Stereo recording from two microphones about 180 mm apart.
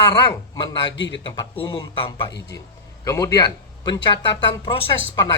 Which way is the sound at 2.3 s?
75° left (ahead or behind).